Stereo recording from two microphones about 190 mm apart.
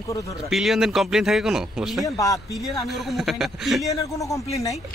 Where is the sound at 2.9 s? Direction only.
Centre (ahead or behind).